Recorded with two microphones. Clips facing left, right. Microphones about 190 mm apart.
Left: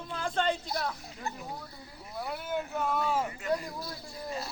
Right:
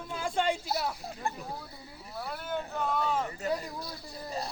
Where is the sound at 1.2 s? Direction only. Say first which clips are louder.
Right 3 dB; 50° right (ahead or behind).